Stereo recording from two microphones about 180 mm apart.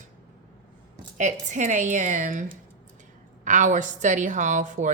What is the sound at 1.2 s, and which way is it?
A woman's voice, 45° right (ahead or behind).